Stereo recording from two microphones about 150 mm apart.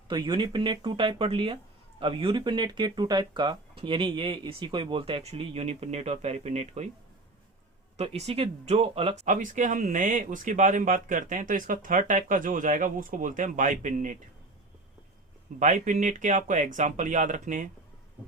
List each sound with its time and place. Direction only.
0.1 s speech: 30° right (ahead or behind); by 6.9 s 50° right (ahead or behind)
7.9 s speech: 40° right (ahead or behind)
9.2 s speech: 60° right (ahead or behind)
15.5 s speech: 55° right (ahead or behind)